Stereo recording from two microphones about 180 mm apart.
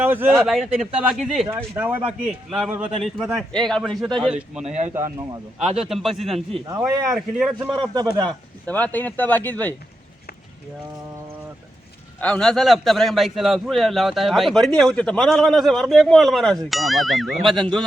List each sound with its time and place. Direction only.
0.0 s a man's voice: 10° right (ahead or behind)
1.5 s a man's voice: 10° right (ahead or behind)
4.6 s speech: 40° right (ahead or behind)
5.5 s a man's voice: 5° right (ahead or behind)
6.7 s a man's voice: 20° right (ahead or behind)
7.3 s a man's voice: 5° right (ahead or behind)
8.2 s speech: 10° left (ahead or behind)
12.2 s a man's voice: 5° left (ahead or behind)